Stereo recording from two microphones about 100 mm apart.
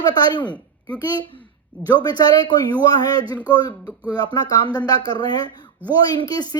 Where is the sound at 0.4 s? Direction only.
15° left (ahead or behind).